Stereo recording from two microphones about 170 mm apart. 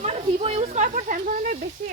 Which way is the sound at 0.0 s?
40° right (ahead or behind).